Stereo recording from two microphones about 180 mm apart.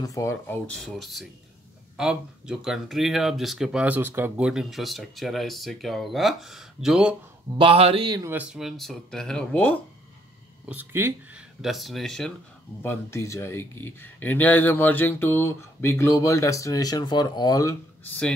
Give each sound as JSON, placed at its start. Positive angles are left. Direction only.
{"t": 0.0, "sound": "speech", "side_deg": 15}
{"t": 0.9, "sound": "speech", "side_deg": 0}
{"t": 7.5, "sound": "speech", "side_deg": -30}
{"t": 8.3, "sound": "speech", "side_deg": -5}
{"t": 10.7, "sound": "speech", "side_deg": -10}
{"t": 11.6, "sound": "speech", "side_deg": 0}
{"t": 12.8, "sound": "speech", "side_deg": 15}